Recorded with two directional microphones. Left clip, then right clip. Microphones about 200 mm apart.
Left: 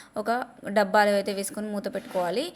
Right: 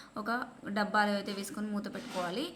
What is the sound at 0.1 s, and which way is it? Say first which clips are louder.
A woman's voice: left 8 dB; 35° left (ahead or behind).